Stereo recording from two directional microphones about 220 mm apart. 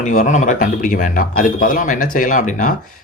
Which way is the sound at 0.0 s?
35° left (ahead or behind).